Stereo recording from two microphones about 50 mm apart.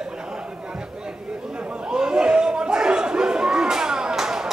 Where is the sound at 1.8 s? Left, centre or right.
Centre.